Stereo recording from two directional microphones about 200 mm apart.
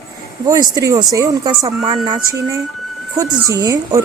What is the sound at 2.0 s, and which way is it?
Speech, 20° right (ahead or behind).